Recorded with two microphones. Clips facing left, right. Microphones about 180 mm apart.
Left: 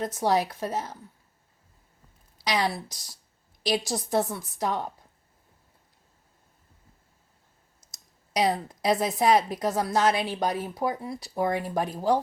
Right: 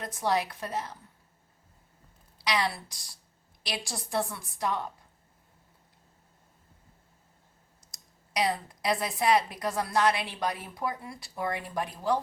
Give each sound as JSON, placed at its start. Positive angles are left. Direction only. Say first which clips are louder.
{"t": 0.0, "sound": "a woman's voice", "louder": "left 4 dB", "side_deg": 40}
{"t": 2.5, "sound": "a woman's voice", "louder": "left 3 dB", "side_deg": 40}
{"t": 7.9, "sound": "a woman's voice", "louder": "right 1 dB", "side_deg": 45}